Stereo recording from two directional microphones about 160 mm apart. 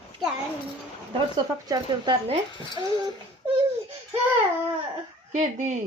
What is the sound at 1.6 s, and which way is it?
Speech, 25° right (ahead or behind).